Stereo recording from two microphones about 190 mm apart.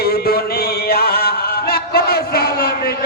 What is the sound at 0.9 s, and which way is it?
Music, 55° left (ahead or behind).